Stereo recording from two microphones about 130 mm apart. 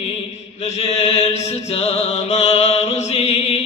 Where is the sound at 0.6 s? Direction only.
50° left (ahead or behind).